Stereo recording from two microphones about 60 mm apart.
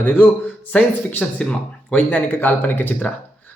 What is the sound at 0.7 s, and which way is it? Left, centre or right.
Speech, left.